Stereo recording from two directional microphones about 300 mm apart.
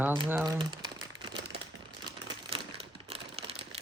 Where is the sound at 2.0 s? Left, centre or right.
Centre.